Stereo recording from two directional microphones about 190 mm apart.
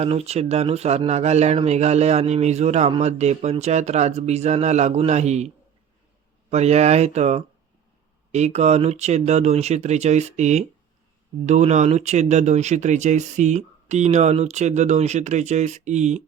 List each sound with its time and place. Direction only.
0.0 s speech: 35° right (ahead or behind)
6.5 s speech: 35° right (ahead or behind)